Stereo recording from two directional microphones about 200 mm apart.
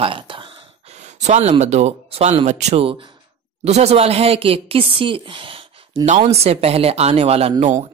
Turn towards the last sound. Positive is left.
turn(degrees=-35)  # may be behind; listen again after turning